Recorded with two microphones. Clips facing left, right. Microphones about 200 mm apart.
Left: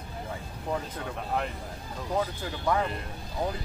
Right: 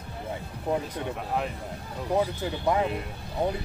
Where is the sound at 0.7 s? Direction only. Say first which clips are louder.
Right 4 dB; 20° right (ahead or behind).